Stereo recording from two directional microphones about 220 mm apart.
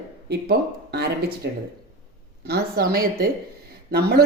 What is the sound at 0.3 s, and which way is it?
A woman's voice, 50° right (ahead or behind).